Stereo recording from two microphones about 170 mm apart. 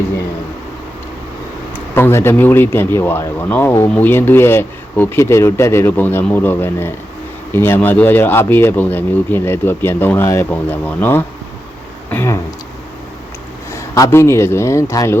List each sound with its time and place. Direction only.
2.0 s speech: 15° left (ahead or behind)
13.7 s speech: 20° left (ahead or behind)